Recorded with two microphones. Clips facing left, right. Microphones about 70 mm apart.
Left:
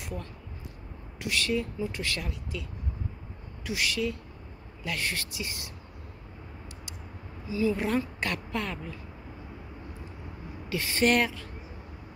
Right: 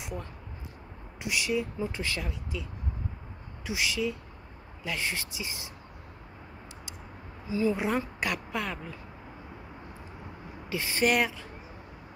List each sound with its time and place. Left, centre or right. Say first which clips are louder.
0.0 s speech: even; centre
3.6 s speech: even; centre
7.4 s speech: even; right
7.7 s speech: left 1 dB; centre
10.7 s speech: left 1 dB; centre